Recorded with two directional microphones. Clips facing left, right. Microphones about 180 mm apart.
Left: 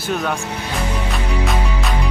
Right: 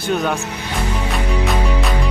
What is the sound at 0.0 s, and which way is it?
Speech, centre (ahead or behind).